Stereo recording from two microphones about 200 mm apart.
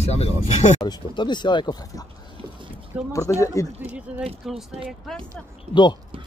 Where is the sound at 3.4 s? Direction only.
15° left (ahead or behind).